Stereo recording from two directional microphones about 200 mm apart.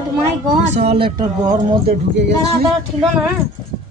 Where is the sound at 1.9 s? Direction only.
60° right (ahead or behind).